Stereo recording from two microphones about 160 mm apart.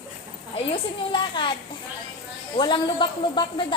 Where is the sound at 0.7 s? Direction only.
30° left (ahead or behind).